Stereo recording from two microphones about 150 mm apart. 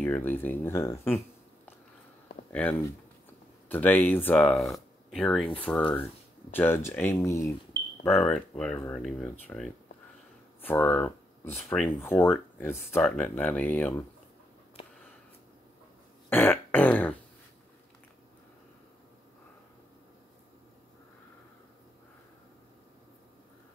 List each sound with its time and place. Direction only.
0.0 s speech: 10° left (ahead or behind)
2.5 s speech: 10° left (ahead or behind)
8.0 s speech: 10° left (ahead or behind)
16.3 s a sound: 15° left (ahead or behind)